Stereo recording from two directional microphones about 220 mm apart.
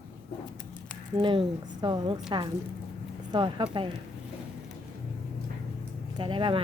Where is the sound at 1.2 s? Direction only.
20° right (ahead or behind).